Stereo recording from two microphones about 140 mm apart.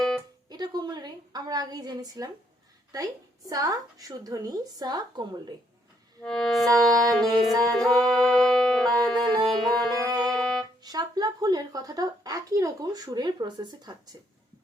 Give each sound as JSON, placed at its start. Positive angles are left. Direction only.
{"t": 0.4, "sound": "a sound", "side_deg": -30}
{"t": 2.9, "sound": "a woman's voice", "side_deg": -25}
{"t": 6.2, "sound": "music", "side_deg": 5}
{"t": 10.8, "sound": "a woman's voice", "side_deg": -30}